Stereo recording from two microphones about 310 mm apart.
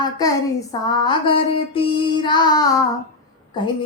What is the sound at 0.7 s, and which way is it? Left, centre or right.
Female singing, centre.